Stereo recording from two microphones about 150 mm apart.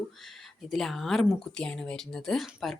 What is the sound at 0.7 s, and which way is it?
Speech, centre (ahead or behind).